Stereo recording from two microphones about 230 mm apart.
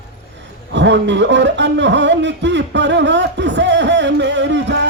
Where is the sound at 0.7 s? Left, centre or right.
Right.